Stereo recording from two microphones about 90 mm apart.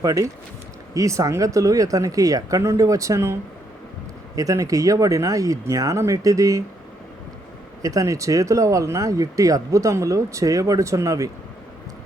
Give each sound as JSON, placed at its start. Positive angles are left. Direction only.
{"t": 0.0, "sound": "speech", "side_deg": -40}
{"t": 4.4, "sound": "speech", "side_deg": -40}
{"t": 7.8, "sound": "speech", "side_deg": -40}